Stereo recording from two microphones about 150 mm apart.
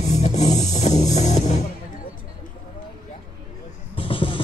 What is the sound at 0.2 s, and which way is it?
Music, 50° left (ahead or behind).